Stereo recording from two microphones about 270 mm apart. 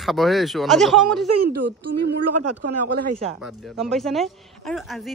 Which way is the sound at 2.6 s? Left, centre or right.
Right.